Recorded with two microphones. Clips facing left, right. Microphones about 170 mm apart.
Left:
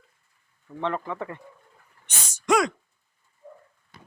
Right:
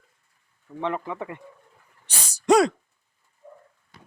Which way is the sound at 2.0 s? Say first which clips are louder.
Right 4 dB; 35° right (ahead or behind).